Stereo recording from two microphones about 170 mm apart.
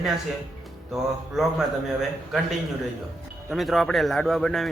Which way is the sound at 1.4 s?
Centre (ahead or behind).